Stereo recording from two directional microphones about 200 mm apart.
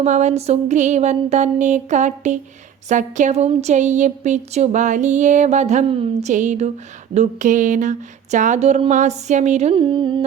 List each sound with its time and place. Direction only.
0.0 s a woman's voice: 35° right (ahead or behind)